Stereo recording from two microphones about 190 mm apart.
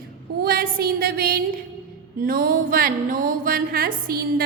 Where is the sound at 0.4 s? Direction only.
50° right (ahead or behind).